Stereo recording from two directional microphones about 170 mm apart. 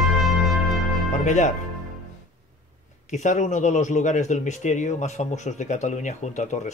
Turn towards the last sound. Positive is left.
turn(degrees=45)  # may be behind; listen again after turning